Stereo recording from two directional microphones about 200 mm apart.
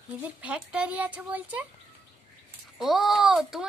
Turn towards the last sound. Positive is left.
turn(degrees=0)  # may be behind; listen again after turning